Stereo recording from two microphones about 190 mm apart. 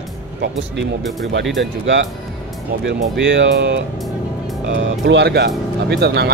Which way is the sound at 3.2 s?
65° right (ahead or behind).